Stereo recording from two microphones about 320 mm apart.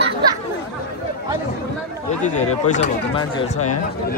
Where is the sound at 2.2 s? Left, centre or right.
Left.